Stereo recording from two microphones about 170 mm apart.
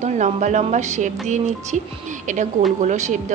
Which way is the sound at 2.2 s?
45° right (ahead or behind).